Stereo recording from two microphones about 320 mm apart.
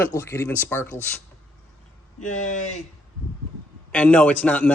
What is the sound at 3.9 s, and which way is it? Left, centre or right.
Speech, centre.